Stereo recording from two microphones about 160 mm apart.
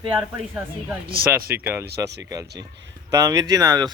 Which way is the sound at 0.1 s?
10° right (ahead or behind).